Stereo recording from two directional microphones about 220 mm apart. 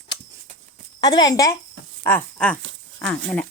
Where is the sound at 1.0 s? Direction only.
15° left (ahead or behind).